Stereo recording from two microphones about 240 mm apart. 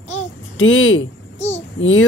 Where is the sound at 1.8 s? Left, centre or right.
Left.